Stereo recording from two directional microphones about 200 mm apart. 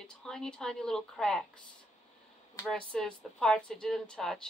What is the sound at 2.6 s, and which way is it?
Speech, 5° left (ahead or behind).